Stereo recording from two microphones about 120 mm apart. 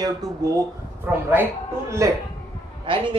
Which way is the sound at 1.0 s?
15° right (ahead or behind).